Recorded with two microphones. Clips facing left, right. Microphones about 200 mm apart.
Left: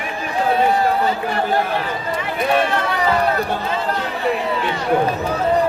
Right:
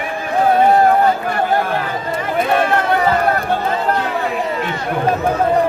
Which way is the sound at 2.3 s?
50° right (ahead or behind).